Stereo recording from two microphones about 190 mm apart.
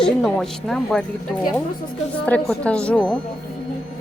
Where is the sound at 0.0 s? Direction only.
Centre (ahead or behind).